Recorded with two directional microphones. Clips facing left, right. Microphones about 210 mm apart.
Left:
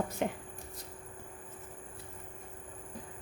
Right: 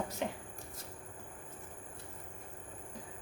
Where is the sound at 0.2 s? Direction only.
55° left (ahead or behind).